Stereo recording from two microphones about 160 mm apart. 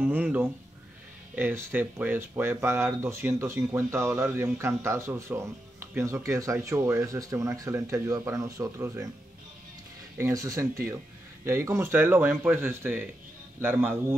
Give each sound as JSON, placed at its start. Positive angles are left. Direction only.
{"t": 0.0, "sound": "speech", "side_deg": -10}
{"t": 10.1, "sound": "speech", "side_deg": -20}